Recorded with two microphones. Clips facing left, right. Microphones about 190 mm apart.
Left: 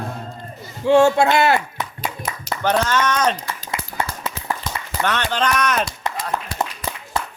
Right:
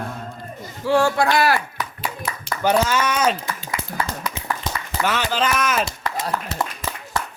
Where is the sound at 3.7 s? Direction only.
25° left (ahead or behind).